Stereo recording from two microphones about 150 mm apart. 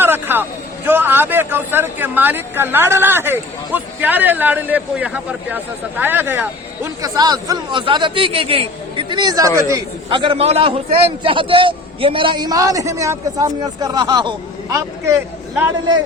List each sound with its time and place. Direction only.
0.0 s vehicle: 15° right (ahead or behind)
0.9 s speech: 15° right (ahead or behind)
7.0 s a man's voice: 25° right (ahead or behind)
10.1 s a man's voice: 35° right (ahead or behind); by 15.2 s 20° right (ahead or behind)